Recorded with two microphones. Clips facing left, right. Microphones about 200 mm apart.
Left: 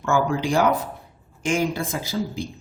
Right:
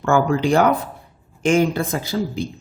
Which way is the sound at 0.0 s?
60° right (ahead or behind).